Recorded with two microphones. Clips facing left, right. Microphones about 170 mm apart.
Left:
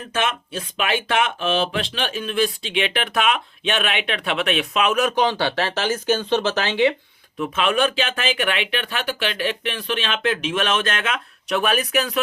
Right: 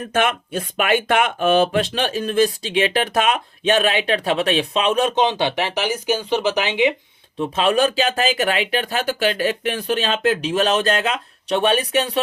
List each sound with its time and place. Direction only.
0.1 s speech: 50° right (ahead or behind); by 6.9 s 15° right (ahead or behind)
7.3 s speech: 30° right (ahead or behind)